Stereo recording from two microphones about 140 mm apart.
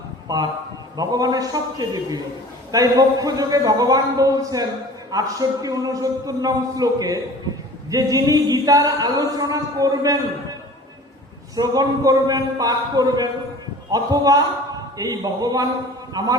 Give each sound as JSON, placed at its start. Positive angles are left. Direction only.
{"t": 0.3, "sound": "speech", "side_deg": -25}
{"t": 11.5, "sound": "speech", "side_deg": -25}